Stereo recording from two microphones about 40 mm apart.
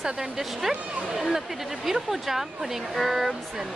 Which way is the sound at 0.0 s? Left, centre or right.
Centre.